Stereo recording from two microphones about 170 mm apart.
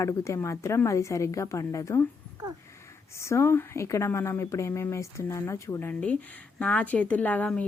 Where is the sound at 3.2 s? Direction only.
15° left (ahead or behind).